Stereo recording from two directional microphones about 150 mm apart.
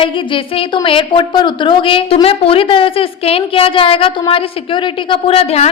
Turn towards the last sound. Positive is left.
turn(degrees=45)  # may be behind; listen again after turning